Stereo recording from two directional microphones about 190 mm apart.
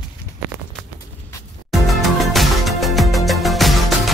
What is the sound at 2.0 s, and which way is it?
Music, centre (ahead or behind).